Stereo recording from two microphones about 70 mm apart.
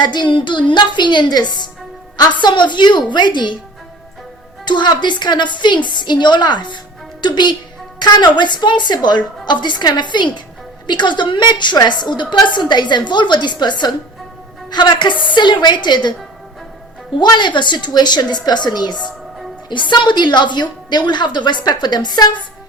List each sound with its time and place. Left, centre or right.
0.0 s a woman's voice: left
4.6 s a woman's voice: left
17.2 s a woman's voice: left